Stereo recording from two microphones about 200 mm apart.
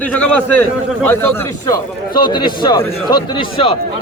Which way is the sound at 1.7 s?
20° left (ahead or behind).